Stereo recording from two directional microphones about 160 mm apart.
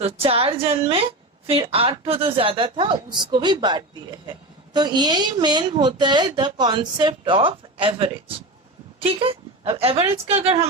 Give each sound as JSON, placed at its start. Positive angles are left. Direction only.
{"t": 0.0, "sound": "a woman's voice", "side_deg": -35}